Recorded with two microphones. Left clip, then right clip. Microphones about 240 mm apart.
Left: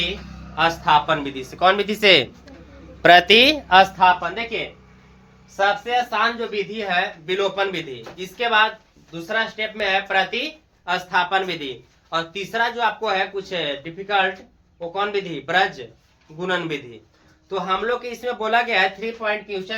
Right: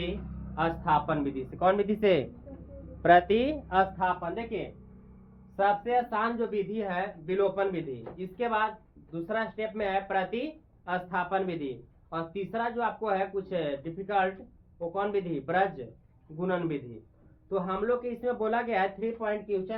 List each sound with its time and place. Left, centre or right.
0.5 s speech: centre; by 2.2 s left
3.0 s speech: left
5.5 s speech: centre